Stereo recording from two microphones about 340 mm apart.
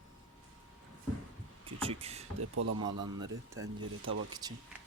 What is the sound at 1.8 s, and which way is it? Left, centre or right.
Speech, centre.